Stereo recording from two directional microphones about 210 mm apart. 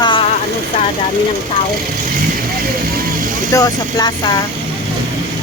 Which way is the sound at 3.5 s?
15° left (ahead or behind).